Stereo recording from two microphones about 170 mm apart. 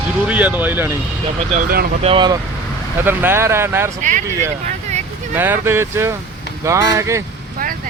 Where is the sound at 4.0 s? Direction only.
50° right (ahead or behind).